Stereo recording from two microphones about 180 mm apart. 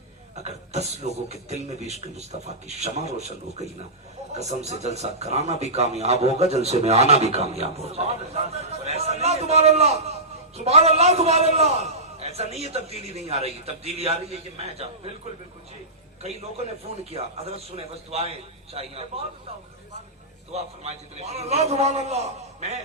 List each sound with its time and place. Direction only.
0.4 s a sound: 40° right (ahead or behind)
1.0 s a man's voice: 40° right (ahead or behind)
17.0 s a man's voice: 35° right (ahead or behind)
20.5 s a man's voice: 35° right (ahead or behind)